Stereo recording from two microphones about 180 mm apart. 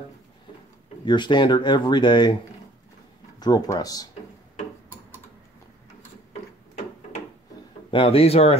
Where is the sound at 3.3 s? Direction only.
20° left (ahead or behind).